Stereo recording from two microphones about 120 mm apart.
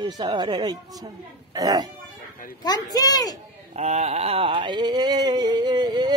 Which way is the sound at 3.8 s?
65° right (ahead or behind).